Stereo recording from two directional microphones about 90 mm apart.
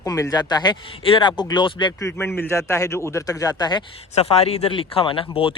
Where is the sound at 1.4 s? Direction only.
55° left (ahead or behind).